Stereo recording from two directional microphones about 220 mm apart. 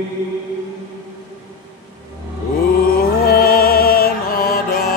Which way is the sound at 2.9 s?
45° left (ahead or behind).